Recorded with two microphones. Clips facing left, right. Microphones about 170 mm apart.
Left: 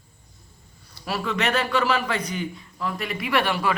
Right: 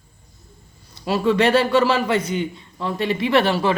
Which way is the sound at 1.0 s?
25° right (ahead or behind).